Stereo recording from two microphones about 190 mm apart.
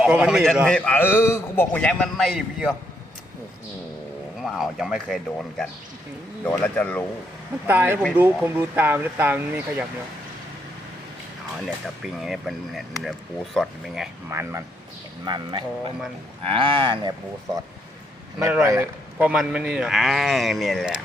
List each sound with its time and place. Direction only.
0.0 s a man's voice: 5° right (ahead or behind)
4.4 s a man's voice: centre (ahead or behind)
7.7 s speech: 10° right (ahead or behind)
12.2 s speech: centre (ahead or behind)
14.3 s speech: 15° right (ahead or behind)
15.2 s speech: 25° right (ahead or behind)
18.4 s speech: 15° right (ahead or behind)